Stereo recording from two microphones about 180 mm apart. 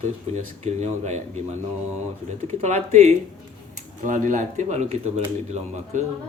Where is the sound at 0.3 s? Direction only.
40° right (ahead or behind).